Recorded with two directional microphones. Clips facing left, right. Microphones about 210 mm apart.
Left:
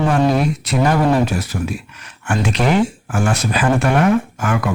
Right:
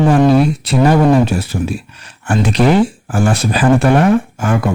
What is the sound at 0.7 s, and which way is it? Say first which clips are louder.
Speech: right 4 dB; 30° right (ahead or behind).